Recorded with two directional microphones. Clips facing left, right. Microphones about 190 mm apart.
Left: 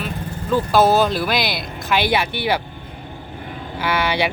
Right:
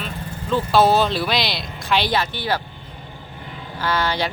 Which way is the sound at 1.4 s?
50° left (ahead or behind).